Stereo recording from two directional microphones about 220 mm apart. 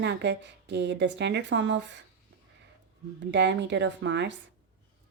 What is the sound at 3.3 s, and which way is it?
Speech, 55° right (ahead or behind).